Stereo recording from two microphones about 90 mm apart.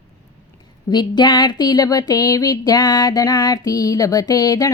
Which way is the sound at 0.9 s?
55° left (ahead or behind).